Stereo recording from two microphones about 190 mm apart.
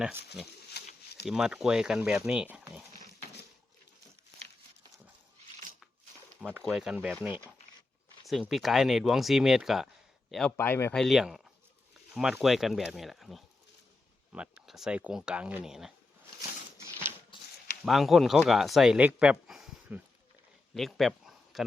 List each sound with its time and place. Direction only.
0.7 s bird: 60° left (ahead or behind)
1.3 s speech: centre (ahead or behind)
6.5 s speech: 5° right (ahead or behind)
17.3 s a sound: 25° left (ahead or behind)
17.8 s speech: centre (ahead or behind)